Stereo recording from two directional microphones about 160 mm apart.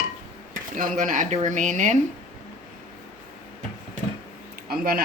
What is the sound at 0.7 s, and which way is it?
Speech, 55° right (ahead or behind).